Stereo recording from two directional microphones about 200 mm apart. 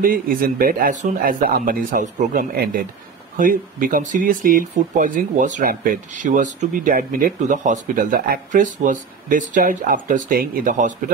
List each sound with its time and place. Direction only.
0.0 s speech: 45° right (ahead or behind)